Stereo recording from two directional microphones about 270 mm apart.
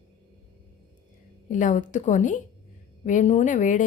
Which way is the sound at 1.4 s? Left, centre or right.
Left.